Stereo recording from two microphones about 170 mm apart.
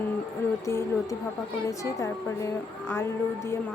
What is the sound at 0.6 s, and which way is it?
A woman's voice, 15° left (ahead or behind).